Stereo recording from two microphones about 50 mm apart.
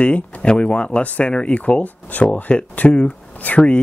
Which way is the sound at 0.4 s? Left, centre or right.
Left.